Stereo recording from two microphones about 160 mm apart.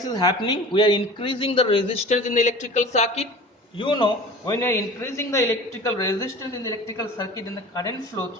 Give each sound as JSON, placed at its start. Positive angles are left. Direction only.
{"t": 0.0, "sound": "speech", "side_deg": 25}
{"t": 3.8, "sound": "speech", "side_deg": 30}